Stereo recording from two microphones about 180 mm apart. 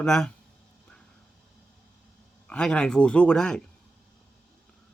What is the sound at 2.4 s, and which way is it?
Speech, 5° left (ahead or behind).